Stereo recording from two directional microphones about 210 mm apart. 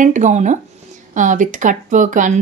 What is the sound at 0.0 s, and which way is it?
Speech, 35° right (ahead or behind).